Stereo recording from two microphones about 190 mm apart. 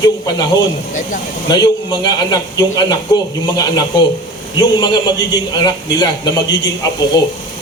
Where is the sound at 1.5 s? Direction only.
20° left (ahead or behind).